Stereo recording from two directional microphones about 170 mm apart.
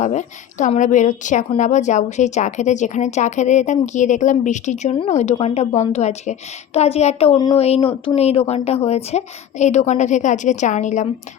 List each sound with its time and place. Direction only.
0.0 s a woman's voice: 45° left (ahead or behind)